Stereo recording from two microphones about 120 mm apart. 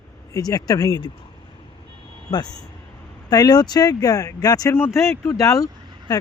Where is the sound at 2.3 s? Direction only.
35° left (ahead or behind).